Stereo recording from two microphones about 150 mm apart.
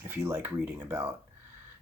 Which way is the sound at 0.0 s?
15° right (ahead or behind).